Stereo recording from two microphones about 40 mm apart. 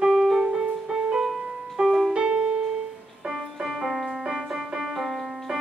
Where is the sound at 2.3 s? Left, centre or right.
Right.